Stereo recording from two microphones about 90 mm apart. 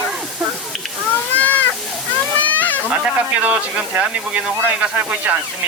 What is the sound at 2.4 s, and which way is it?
Children playing, 20° left (ahead or behind).